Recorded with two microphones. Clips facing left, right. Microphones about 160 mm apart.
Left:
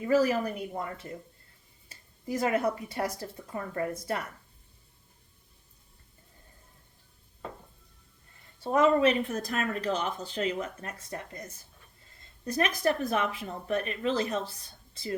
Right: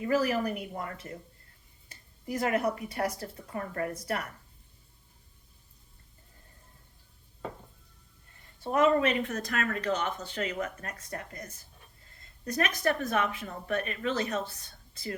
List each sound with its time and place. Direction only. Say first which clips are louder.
0.1 s speech: left 3 dB; 25° left (ahead or behind)
2.2 s speech: left 1 dB; 25° left (ahead or behind)
8.6 s speech: left 2 dB; 30° left (ahead or behind)